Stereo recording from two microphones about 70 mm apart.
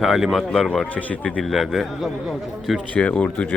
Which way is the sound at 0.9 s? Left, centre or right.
Left.